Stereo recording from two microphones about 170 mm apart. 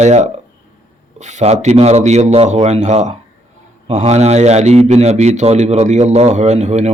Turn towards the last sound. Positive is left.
turn(degrees=-45)  # may be behind; listen again after turning